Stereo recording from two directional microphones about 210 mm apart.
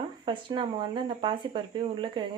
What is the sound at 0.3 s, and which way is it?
Speech, 20° right (ahead or behind).